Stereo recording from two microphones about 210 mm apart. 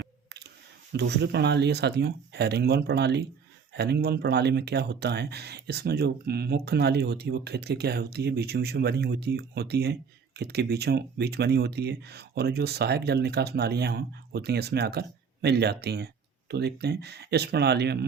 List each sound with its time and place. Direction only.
0.9 s speech: 55° right (ahead or behind)